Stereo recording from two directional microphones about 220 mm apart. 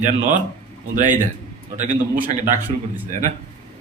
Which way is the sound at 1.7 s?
15° right (ahead or behind).